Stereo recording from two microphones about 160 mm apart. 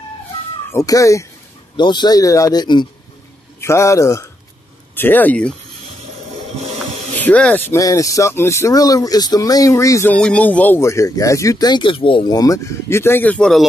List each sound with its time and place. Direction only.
0.7 s speech: 20° left (ahead or behind)
7.2 s speech: 10° left (ahead or behind)
7.7 s speech: 20° left (ahead or behind)
10.1 s speech: 5° left (ahead or behind)